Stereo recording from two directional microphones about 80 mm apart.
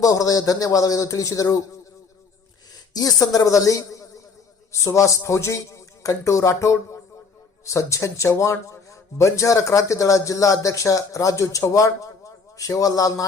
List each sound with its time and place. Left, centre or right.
0.0 s a man's voice: left
2.9 s a man's voice: left